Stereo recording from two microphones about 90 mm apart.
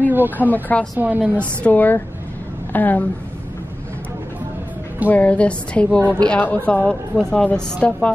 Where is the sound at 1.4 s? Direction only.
15° left (ahead or behind).